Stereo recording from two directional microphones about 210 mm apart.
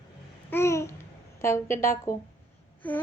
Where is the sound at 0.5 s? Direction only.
15° left (ahead or behind).